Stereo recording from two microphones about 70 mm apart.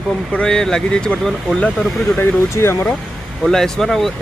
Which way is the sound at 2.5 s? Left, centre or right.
Left.